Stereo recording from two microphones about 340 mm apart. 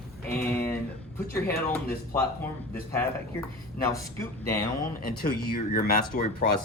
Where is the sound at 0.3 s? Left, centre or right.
Centre.